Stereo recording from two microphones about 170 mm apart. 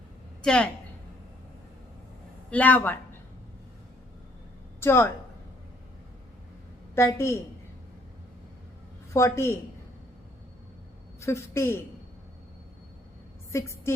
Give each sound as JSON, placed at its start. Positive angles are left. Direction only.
{"t": 0.4, "sound": "a woman's voice", "side_deg": 5}
{"t": 2.5, "sound": "a woman's voice", "side_deg": 10}
{"t": 4.8, "sound": "a woman's voice", "side_deg": 15}
{"t": 6.9, "sound": "a woman's voice", "side_deg": 15}
{"t": 9.1, "sound": "a woman's voice", "side_deg": 15}
{"t": 11.2, "sound": "a woman's voice", "side_deg": 15}
{"t": 13.5, "sound": "a woman's voice", "side_deg": 15}